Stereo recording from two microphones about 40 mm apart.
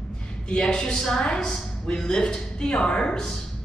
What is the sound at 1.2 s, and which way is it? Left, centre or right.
A woman's voice, left.